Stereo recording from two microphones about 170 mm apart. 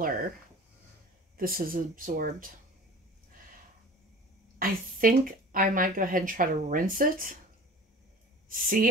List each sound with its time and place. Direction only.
1.3 s speech: 60° right (ahead or behind)
4.6 s speech: 55° right (ahead or behind)
8.5 s speech: 55° right (ahead or behind)